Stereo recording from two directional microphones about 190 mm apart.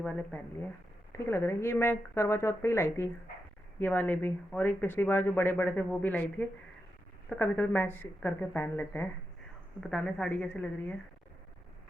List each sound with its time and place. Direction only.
0.0 s a woman's voice: 5° left (ahead or behind)